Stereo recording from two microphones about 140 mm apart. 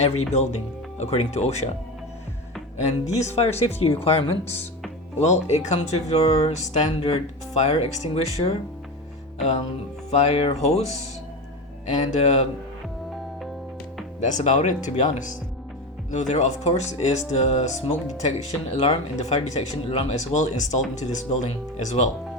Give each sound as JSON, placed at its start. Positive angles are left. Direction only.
{"t": 0.0, "sound": "speech", "side_deg": 50}
{"t": 3.2, "sound": "speech", "side_deg": 50}
{"t": 10.1, "sound": "speech", "side_deg": 50}
{"t": 14.2, "sound": "speech", "side_deg": 55}